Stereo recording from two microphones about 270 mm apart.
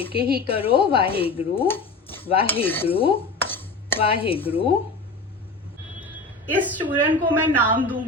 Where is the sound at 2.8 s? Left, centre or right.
Left.